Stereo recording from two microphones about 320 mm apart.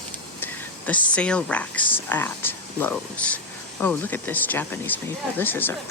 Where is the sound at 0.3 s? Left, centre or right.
Centre.